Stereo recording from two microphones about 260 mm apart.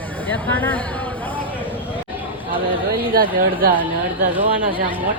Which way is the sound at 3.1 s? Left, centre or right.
Right.